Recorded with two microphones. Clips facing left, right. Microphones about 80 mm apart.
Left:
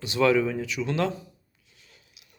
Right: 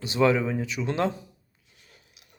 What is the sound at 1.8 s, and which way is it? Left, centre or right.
Biting, right.